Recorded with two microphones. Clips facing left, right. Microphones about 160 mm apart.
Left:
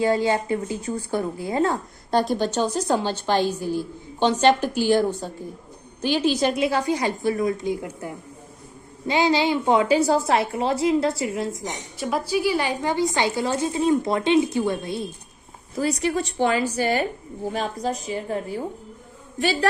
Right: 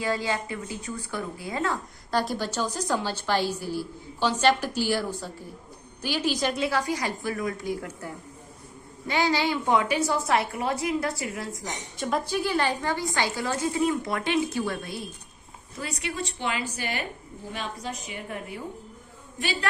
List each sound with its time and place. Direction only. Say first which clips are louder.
0.0 s a woman's voice: left 7 dB; 25° left (ahead or behind)
11.9 s a woman's voice: left 3 dB; 5° left (ahead or behind); by 15.0 s 25° left (ahead or behind)
15.7 s a woman's voice: left 11 dB; 40° left (ahead or behind)